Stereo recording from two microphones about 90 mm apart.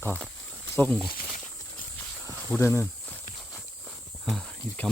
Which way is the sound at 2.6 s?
30° left (ahead or behind).